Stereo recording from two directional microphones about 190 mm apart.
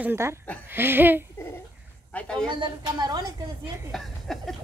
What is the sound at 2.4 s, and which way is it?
A woman's voice, 25° right (ahead or behind).